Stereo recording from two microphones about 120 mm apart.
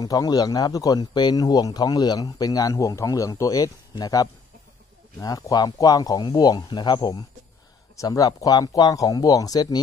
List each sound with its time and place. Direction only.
0.0 s speech: 30° left (ahead or behind)